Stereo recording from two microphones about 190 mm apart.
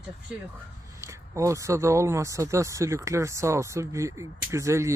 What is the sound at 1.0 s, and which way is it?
Speech, 15° right (ahead or behind).